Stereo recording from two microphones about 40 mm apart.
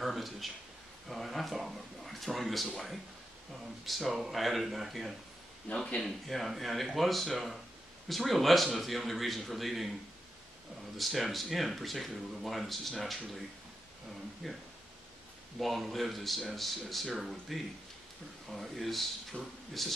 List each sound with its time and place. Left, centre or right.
0.0 s a sound: centre
1.0 s speech: centre
5.7 s speech: left
6.0 s speech: centre
11.0 s speech: centre
14.4 s speech: centre
15.6 s speech: centre